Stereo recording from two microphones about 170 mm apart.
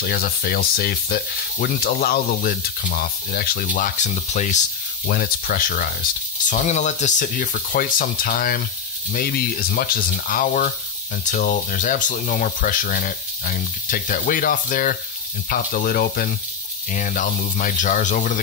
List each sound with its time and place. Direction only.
0.0 s speech: 65° left (ahead or behind)
6.5 s speech: 45° left (ahead or behind)